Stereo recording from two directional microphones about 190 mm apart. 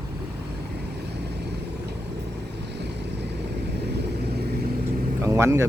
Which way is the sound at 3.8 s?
60° right (ahead or behind).